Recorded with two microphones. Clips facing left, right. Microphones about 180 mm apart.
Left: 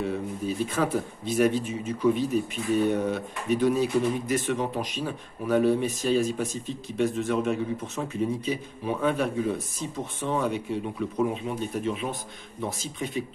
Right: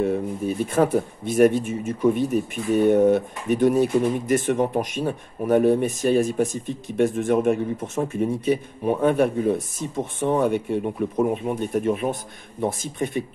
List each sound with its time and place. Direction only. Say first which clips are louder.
0.0 s speech: right 6 dB; 50° right (ahead or behind)